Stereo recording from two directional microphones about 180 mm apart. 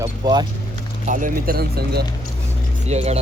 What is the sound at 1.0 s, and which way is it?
Speech, 45° right (ahead or behind).